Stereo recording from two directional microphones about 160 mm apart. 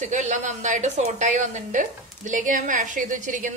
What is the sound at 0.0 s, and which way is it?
A woman's voice, 50° right (ahead or behind).